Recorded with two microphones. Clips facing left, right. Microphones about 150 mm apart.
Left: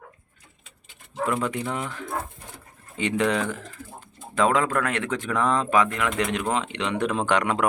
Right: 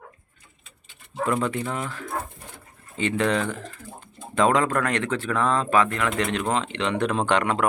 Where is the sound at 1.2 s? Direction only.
5° left (ahead or behind).